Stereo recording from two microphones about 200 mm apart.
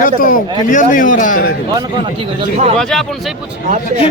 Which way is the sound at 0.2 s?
45° left (ahead or behind).